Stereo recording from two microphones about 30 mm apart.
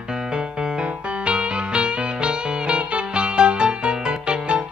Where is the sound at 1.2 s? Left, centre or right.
Right.